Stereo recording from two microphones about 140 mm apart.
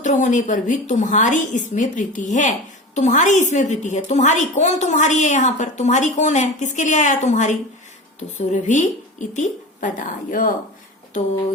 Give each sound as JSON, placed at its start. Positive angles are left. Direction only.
{"t": 0.0, "sound": "a woman's voice", "side_deg": 60}